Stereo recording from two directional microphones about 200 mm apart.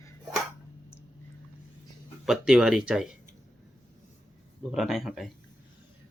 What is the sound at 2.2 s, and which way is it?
Speech, centre (ahead or behind).